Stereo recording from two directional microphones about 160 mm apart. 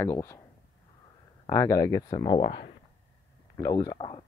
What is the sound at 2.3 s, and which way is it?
Speech, 35° left (ahead or behind).